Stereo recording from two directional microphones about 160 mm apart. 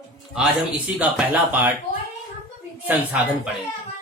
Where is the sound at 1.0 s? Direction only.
10° right (ahead or behind).